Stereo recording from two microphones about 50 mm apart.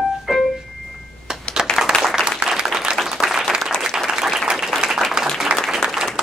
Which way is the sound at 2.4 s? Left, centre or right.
Centre.